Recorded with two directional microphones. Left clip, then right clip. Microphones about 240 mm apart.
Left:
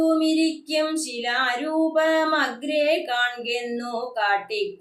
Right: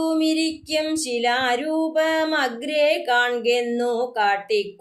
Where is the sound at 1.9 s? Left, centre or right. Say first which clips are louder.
Even; right.